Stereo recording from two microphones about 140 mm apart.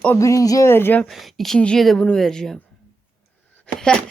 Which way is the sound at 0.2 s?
20° left (ahead or behind).